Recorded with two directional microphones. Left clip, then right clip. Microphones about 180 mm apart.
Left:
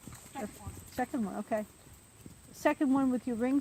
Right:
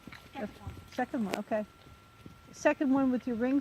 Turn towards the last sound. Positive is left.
turn(degrees=-45)  # may be behind; listen again after turning